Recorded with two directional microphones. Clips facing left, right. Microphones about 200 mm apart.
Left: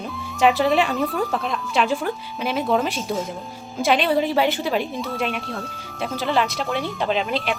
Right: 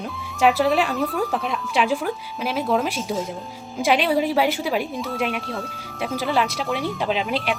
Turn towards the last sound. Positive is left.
turn(degrees=-5)  # may be behind; listen again after turning